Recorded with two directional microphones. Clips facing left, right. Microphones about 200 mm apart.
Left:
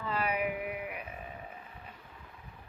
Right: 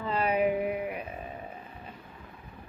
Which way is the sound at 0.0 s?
25° right (ahead or behind).